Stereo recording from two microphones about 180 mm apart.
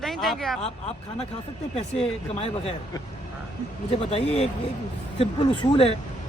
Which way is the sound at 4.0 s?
35° left (ahead or behind).